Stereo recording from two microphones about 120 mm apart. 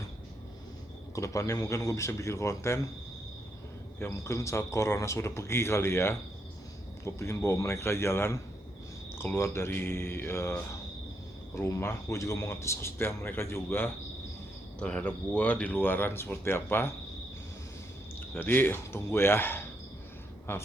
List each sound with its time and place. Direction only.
1.1 s speech: 25° left (ahead or behind)
4.0 s speech: 25° left (ahead or behind)
18.3 s speech: 15° left (ahead or behind)